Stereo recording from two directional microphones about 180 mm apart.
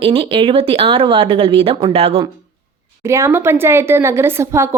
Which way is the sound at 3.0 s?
15° right (ahead or behind).